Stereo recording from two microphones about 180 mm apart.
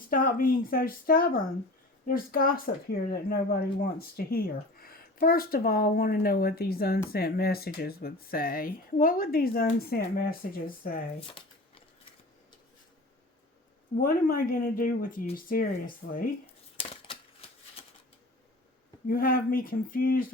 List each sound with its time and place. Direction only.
0.1 s speech: 50° left (ahead or behind)
11.3 s shuffling cards: 30° left (ahead or behind)
14.0 s speech: 55° left (ahead or behind)
16.7 s a sound: 30° left (ahead or behind)
19.0 s speech: 55° left (ahead or behind)